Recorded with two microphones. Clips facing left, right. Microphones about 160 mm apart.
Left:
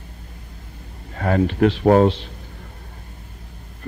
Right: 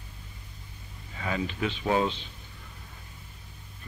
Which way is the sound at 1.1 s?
55° left (ahead or behind).